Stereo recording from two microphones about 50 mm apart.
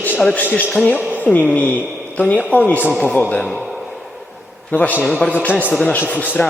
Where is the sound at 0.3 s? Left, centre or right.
Left.